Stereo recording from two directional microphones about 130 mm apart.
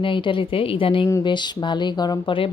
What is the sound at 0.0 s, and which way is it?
A woman's voice, 40° left (ahead or behind).